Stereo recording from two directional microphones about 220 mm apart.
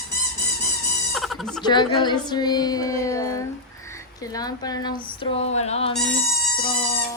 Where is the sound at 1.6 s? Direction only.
20° left (ahead or behind).